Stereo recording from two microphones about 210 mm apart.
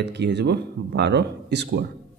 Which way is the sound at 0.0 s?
55° right (ahead or behind).